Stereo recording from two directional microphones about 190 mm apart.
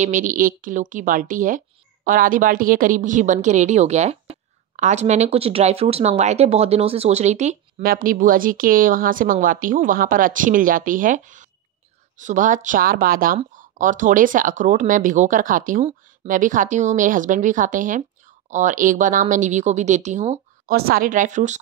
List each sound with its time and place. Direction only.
0.0 s a woman's voice: 40° right (ahead or behind)
20.7 s a woman's voice: 50° right (ahead or behind)